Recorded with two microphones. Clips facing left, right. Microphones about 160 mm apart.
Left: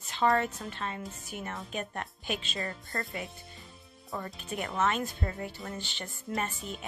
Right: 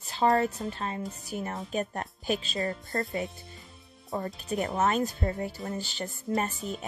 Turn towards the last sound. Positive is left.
turn(degrees=-40)  # may be behind; listen again after turning